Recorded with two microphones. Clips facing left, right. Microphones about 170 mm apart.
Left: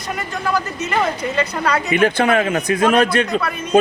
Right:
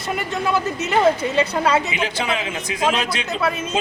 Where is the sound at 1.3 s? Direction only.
25° right (ahead or behind).